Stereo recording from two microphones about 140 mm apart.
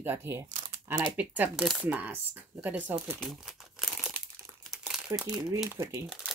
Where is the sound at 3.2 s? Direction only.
Centre (ahead or behind).